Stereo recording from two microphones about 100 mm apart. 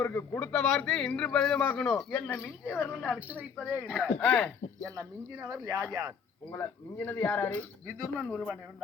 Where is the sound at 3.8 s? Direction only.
10° left (ahead or behind).